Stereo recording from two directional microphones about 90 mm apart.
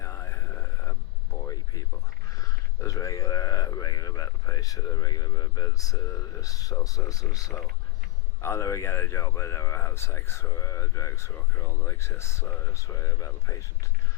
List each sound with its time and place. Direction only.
0.0 s vehicle: 35° left (ahead or behind)
2.4 s a sound: 40° left (ahead or behind)
8.4 s speech: 30° left (ahead or behind)